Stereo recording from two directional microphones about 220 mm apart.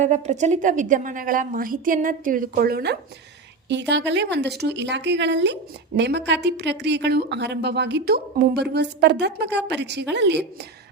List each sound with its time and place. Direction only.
0.0 s a woman's voice: 30° right (ahead or behind); by 10.4 s 50° right (ahead or behind)